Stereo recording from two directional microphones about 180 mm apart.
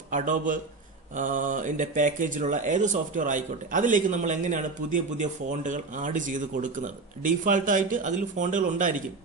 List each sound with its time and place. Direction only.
0.1 s speech: 45° right (ahead or behind)